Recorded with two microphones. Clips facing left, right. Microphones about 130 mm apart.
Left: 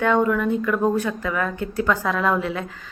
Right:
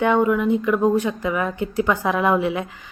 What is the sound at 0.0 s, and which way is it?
Speech, 15° right (ahead or behind).